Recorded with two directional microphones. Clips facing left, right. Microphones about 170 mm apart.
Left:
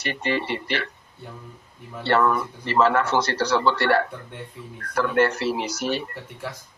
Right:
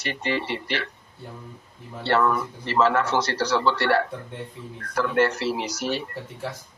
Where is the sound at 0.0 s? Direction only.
55° left (ahead or behind).